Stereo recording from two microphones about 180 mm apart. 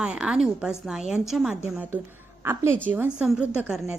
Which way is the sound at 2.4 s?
15° right (ahead or behind).